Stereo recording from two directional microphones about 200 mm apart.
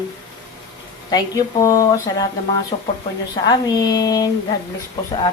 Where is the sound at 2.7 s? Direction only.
30° left (ahead or behind).